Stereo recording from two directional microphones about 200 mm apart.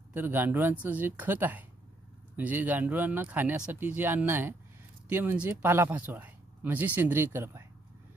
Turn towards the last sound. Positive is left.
turn(degrees=-10)  # may be behind; listen again after turning